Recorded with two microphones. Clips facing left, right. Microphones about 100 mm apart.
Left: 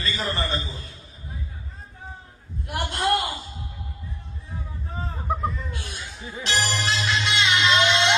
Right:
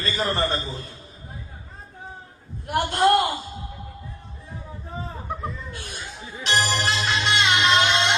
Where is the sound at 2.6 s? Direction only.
50° right (ahead or behind).